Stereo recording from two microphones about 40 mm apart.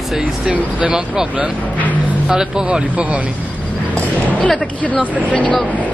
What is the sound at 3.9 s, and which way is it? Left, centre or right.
Basketball bounce, left.